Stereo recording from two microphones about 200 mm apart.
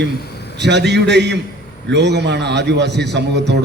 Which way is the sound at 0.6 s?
60° right (ahead or behind).